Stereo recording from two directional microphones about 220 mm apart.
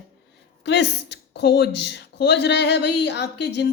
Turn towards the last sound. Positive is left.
turn(degrees=50)  # may be behind; listen again after turning